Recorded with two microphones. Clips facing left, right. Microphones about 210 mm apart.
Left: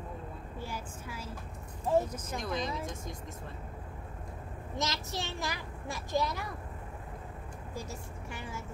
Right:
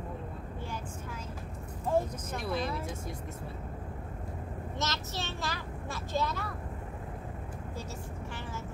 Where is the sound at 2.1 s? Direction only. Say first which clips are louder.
Right 1 dB; 5° right (ahead or behind).